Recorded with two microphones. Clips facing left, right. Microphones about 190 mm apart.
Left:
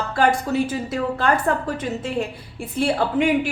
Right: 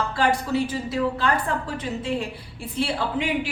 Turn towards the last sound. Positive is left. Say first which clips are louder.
# left 6 dB
turn(degrees=50)  # may be behind; listen again after turning